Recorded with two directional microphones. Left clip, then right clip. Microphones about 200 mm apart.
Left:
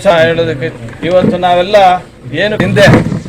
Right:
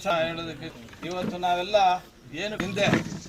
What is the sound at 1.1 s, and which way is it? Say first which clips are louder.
Speech: left 18 dB; 10° left (ahead or behind).